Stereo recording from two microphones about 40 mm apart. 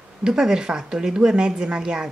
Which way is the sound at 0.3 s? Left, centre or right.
Centre.